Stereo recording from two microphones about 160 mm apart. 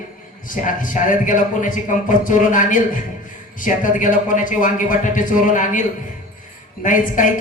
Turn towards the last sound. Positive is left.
turn(degrees=55)  # may be behind; listen again after turning